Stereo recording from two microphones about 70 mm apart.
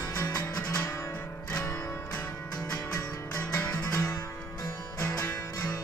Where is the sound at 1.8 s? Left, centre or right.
Left.